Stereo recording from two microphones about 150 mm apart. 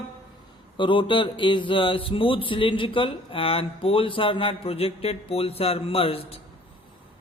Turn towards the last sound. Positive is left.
turn(degrees=40)  # may be behind; listen again after turning